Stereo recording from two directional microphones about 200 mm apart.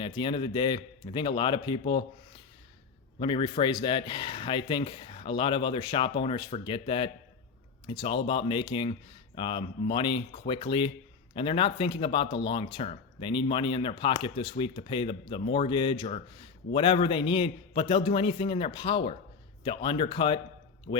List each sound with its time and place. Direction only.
0.0 s speech: 25° left (ahead or behind)
3.2 s speech: 25° left (ahead or behind)
20.9 s speech: 40° left (ahead or behind)